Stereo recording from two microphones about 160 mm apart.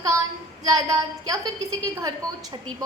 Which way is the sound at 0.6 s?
25° right (ahead or behind).